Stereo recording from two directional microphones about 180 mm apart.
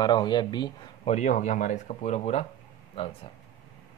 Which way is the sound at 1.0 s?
40° left (ahead or behind).